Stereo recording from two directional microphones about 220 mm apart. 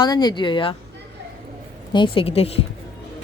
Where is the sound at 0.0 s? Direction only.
20° left (ahead or behind).